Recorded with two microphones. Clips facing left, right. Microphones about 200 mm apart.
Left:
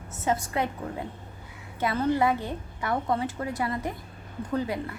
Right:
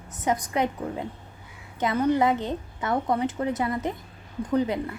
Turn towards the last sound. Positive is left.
turn(degrees=-20)  # may be behind; listen again after turning